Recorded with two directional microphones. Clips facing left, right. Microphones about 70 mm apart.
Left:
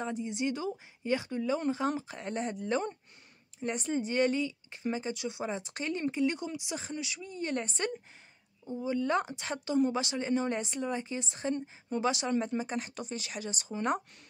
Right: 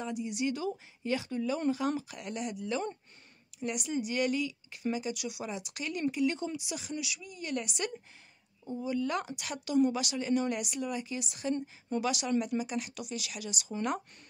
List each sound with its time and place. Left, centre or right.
0.0 s speech: left
6.1 s speech: left
13.7 s speech: left